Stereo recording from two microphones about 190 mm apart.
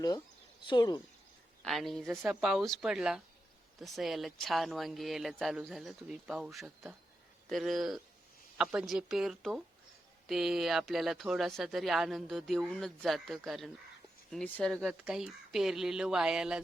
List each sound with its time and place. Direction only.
0.6 s speech: 25° left (ahead or behind)
1.6 s speech: centre (ahead or behind)